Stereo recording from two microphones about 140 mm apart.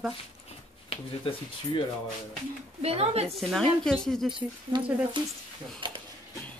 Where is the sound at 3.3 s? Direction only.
Centre (ahead or behind).